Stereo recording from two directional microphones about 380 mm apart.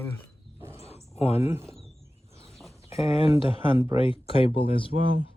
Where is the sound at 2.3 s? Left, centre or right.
Centre.